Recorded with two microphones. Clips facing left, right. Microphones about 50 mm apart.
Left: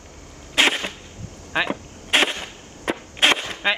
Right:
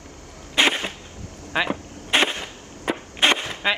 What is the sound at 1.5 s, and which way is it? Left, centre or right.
Speech, centre.